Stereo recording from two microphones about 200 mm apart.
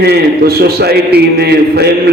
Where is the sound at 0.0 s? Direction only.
55° right (ahead or behind).